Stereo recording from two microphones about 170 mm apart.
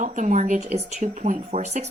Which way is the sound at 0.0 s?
45° right (ahead or behind).